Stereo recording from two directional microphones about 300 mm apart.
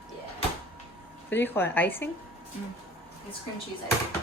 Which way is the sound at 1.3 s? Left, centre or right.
Centre.